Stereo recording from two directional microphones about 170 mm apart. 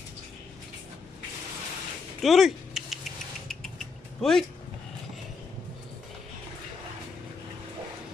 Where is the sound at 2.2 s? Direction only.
Centre (ahead or behind).